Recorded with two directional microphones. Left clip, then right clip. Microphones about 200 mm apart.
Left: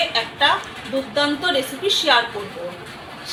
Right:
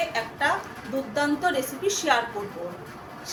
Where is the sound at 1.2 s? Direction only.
15° right (ahead or behind).